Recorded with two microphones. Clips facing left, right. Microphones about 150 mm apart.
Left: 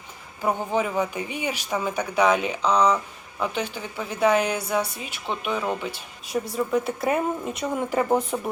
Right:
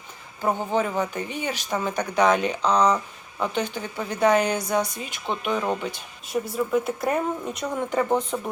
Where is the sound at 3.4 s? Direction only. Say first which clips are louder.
Right 1 dB; 5° left (ahead or behind).